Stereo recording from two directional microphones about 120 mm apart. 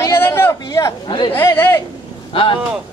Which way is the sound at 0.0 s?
20° left (ahead or behind).